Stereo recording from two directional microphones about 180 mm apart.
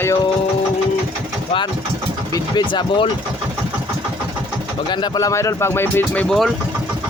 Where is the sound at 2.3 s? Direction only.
25° left (ahead or behind).